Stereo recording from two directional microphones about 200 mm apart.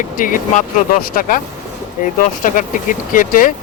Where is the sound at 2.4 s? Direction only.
40° left (ahead or behind).